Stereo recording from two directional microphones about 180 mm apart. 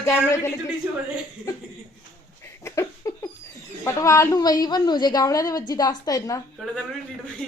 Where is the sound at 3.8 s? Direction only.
15° left (ahead or behind).